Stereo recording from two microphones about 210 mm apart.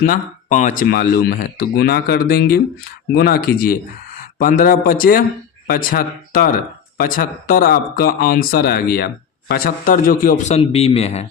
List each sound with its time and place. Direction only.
0.0 s a man's voice: 40° left (ahead or behind)